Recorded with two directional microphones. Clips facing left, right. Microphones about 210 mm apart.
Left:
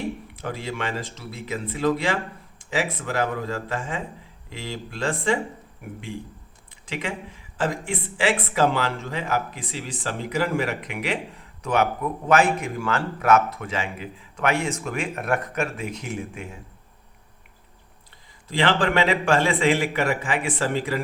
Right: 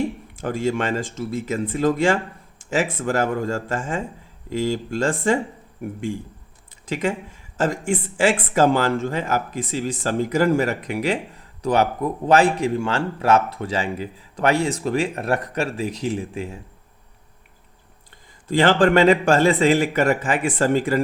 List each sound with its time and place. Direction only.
0.3 s a man's voice: 45° right (ahead or behind)
6.8 s speech: 45° right (ahead or behind)
18.4 s a man's voice: 45° right (ahead or behind)